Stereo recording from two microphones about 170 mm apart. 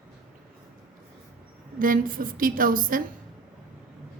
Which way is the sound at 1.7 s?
55° right (ahead or behind).